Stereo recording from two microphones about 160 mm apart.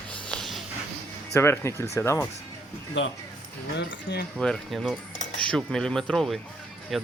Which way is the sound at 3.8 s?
90° left.